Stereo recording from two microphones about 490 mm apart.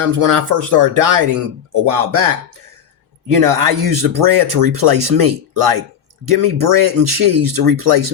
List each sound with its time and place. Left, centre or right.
0.2 s speech: right